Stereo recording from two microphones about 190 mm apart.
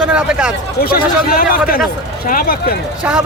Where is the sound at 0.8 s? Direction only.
55° left (ahead or behind).